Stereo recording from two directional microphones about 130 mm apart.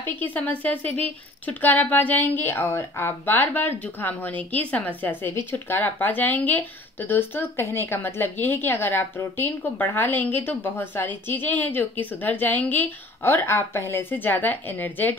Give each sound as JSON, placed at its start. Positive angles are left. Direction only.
{"t": 0.0, "sound": "speech", "side_deg": 15}